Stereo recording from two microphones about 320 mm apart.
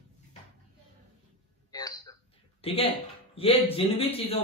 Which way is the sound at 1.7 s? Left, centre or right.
Centre.